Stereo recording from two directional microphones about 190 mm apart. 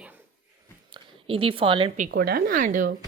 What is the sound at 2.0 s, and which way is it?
Speech, 55° right (ahead or behind).